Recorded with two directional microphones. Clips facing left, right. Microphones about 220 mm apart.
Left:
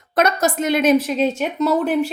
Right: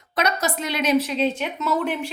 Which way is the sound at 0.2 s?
50° left (ahead or behind).